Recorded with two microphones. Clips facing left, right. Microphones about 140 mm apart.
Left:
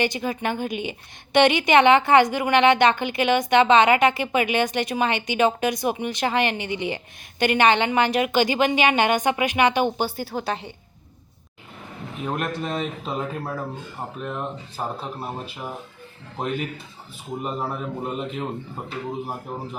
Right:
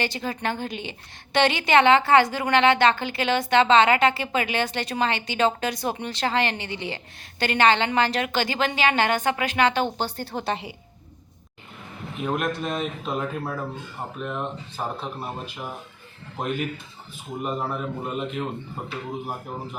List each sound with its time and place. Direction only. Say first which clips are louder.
0.0 s a woman's voice: left 3 dB; 15° left (ahead or behind); by 10.8 s centre (ahead or behind)
12.2 s speech: right 1 dB; centre (ahead or behind)
17.4 s speech: right 1 dB; centre (ahead or behind)